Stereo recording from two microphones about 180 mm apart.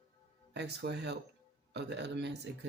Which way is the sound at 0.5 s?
70° right (ahead or behind).